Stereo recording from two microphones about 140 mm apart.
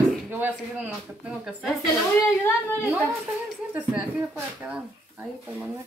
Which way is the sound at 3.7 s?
10° right (ahead or behind).